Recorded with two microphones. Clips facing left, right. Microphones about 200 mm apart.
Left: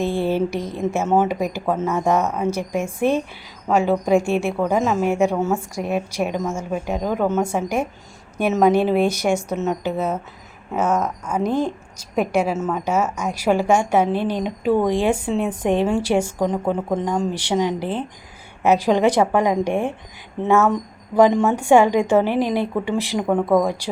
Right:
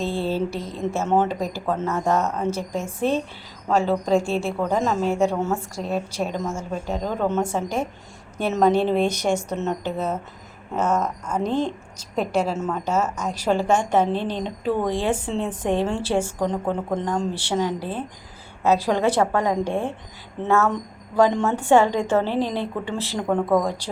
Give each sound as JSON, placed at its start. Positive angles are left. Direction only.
{"t": 0.0, "sound": "a woman's voice", "side_deg": 15}